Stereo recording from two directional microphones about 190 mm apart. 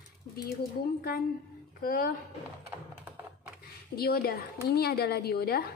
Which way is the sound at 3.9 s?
55° left (ahead or behind).